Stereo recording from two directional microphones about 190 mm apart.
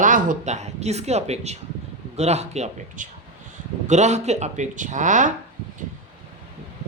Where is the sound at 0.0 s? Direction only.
45° right (ahead or behind).